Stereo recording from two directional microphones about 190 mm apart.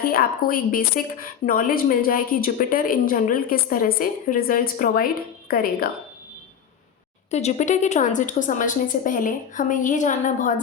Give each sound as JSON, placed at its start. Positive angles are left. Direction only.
{"t": 0.0, "sound": "speech", "side_deg": 50}
{"t": 7.3, "sound": "a woman's voice", "side_deg": 35}